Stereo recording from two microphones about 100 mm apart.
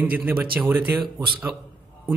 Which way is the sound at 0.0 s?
15° right (ahead or behind).